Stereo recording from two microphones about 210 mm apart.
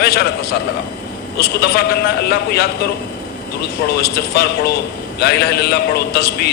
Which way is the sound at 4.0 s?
50° left (ahead or behind).